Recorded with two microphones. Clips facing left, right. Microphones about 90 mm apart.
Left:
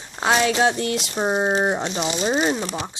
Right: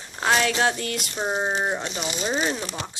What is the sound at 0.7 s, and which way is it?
Speech, 30° left (ahead or behind).